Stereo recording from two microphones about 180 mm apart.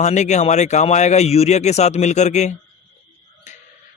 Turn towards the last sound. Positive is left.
turn(degrees=40)  # may be behind; listen again after turning